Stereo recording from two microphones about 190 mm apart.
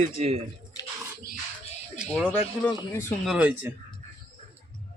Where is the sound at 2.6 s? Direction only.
15° left (ahead or behind).